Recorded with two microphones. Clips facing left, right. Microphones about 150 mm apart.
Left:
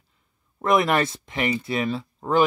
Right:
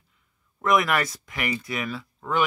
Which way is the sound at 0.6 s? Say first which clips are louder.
Left 2 dB; 30° left (ahead or behind).